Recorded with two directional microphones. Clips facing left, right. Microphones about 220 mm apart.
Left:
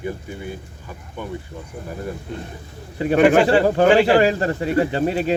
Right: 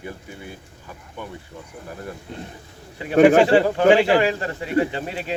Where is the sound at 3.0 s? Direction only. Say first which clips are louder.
Right 1 dB; 40° left (ahead or behind).